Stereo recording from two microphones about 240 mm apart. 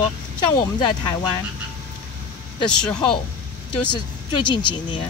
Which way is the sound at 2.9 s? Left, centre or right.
Centre.